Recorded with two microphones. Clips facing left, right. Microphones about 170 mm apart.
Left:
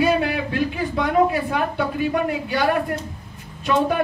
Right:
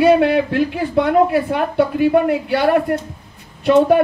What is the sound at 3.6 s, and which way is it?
Speech, 60° right (ahead or behind).